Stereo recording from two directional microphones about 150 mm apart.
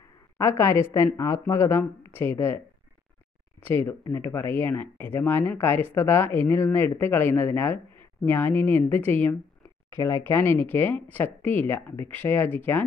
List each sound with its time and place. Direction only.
0.4 s speech: 20° left (ahead or behind)
3.6 s speech: 15° left (ahead or behind)